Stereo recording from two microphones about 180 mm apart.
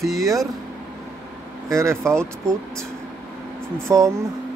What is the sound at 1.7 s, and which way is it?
Speech, 15° right (ahead or behind).